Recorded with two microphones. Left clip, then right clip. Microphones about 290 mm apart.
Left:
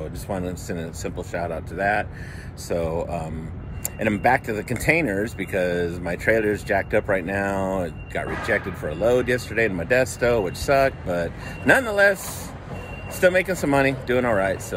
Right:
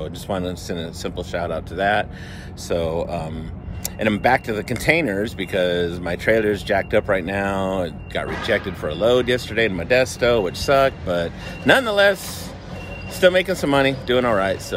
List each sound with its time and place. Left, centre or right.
0.3 s speech: centre
13.2 s speech: centre